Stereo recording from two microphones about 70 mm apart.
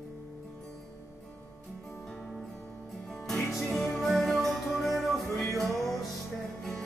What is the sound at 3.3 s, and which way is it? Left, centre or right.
Music, centre.